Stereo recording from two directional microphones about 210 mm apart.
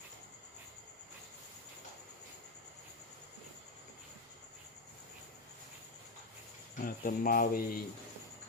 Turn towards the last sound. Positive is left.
turn(degrees=45)  # may be behind; listen again after turning